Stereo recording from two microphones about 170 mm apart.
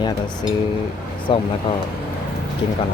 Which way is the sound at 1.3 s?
30° left (ahead or behind).